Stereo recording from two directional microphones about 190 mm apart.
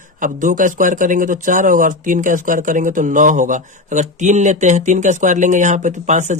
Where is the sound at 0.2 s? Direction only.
45° right (ahead or behind).